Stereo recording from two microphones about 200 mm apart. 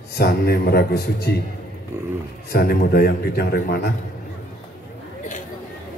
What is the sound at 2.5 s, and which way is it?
A man's voice, 50° left (ahead or behind).